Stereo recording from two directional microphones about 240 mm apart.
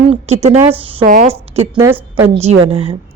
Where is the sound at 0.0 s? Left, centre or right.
Right.